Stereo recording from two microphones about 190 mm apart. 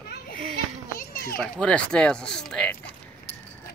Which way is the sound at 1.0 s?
50° left (ahead or behind).